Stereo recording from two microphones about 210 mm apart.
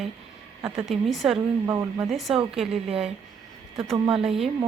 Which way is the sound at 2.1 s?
Centre (ahead or behind).